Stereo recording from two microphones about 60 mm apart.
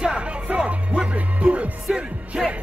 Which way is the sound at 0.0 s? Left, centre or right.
Centre.